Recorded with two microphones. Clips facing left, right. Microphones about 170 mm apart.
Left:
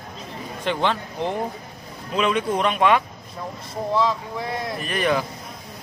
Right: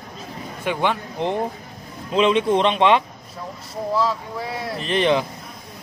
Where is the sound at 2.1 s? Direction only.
25° right (ahead or behind).